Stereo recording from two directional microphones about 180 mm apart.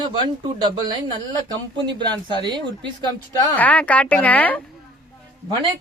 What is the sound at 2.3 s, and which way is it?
Speech, 25° right (ahead or behind).